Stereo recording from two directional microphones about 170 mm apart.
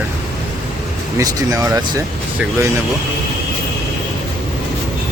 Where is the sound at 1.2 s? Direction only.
20° right (ahead or behind).